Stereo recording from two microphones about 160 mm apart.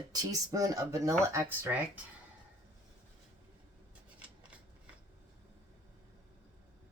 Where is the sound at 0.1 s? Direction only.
20° right (ahead or behind).